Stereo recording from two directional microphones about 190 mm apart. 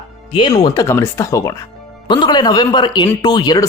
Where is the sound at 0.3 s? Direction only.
20° left (ahead or behind).